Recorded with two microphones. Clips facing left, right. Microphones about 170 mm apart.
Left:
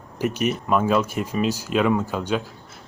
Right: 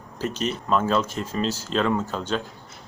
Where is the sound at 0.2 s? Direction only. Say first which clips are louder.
Left 4 dB; 10° left (ahead or behind).